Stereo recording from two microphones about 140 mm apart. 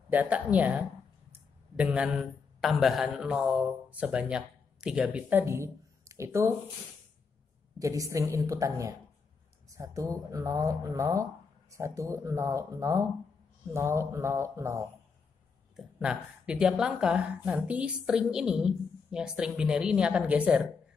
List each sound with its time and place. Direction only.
0.1 s a woman's voice: 10° right (ahead or behind)
7.8 s speech: 25° right (ahead or behind)
15.7 s a woman's voice: 5° right (ahead or behind)